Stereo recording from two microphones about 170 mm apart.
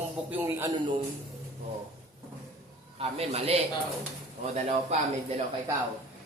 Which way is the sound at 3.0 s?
35° right (ahead or behind).